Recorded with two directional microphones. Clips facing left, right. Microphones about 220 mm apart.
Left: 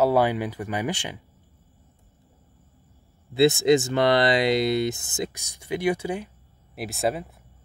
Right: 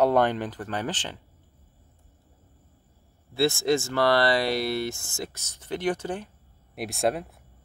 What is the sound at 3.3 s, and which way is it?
Speech, 20° left (ahead or behind).